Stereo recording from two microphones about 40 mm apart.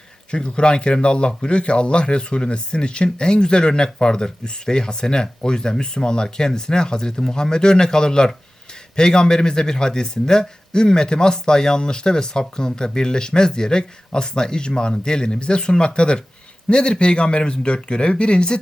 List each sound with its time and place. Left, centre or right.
0.3 s speech: left